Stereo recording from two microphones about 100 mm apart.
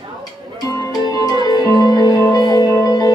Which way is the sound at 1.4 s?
40° left (ahead or behind).